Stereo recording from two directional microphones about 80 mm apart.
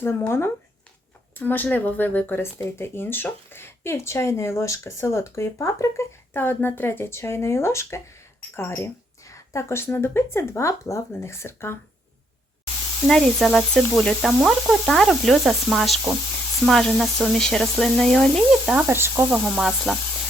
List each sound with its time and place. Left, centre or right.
0.0 s speech: left
1.4 s speech: left
9.2 s speech: left
13.1 s speech: centre
18.6 s speech: centre
18.9 s speech: right
19.3 s speech: centre